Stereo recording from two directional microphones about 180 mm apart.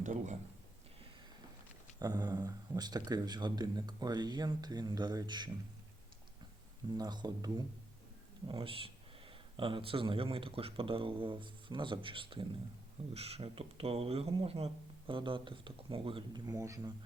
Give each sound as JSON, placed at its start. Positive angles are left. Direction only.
{"t": 0.0, "sound": "a man's voice", "side_deg": -45}
{"t": 2.0, "sound": "speech", "side_deg": -20}
{"t": 6.9, "sound": "speech", "side_deg": -25}